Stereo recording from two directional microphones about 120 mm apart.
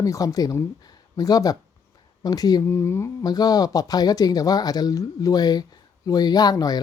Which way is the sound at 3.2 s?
35° left (ahead or behind).